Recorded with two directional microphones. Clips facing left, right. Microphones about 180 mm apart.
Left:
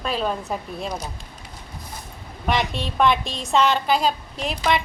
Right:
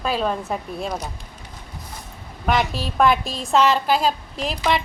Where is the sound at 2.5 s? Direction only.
5° right (ahead or behind).